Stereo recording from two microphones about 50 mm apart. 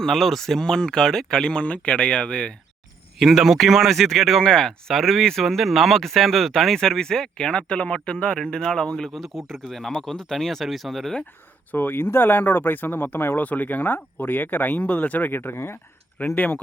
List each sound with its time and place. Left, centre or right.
0.0 s speech: centre; by 2.5 s left
3.2 s speech: centre
11.7 s speech: left
13.4 s speech: left
15.3 s speech: left
16.3 s speech: left